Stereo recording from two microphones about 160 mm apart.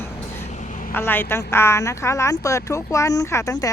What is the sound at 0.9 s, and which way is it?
Speech, 15° left (ahead or behind).